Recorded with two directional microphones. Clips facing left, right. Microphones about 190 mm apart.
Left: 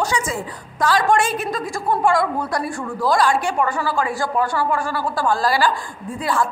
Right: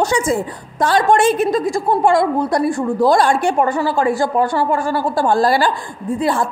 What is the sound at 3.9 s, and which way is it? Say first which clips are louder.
Speech: right 6 dB; 40° right (ahead or behind).